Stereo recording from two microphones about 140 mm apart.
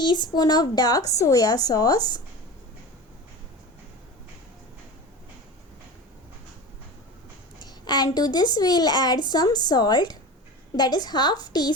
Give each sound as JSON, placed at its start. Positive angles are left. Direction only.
{"t": 0.0, "sound": "a woman's voice", "side_deg": 30}
{"t": 7.6, "sound": "a woman's voice", "side_deg": 30}